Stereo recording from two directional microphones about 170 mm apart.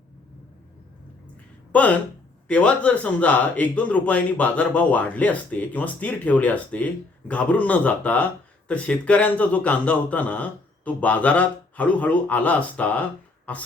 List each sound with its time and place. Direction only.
1.7 s speech: 10° left (ahead or behind)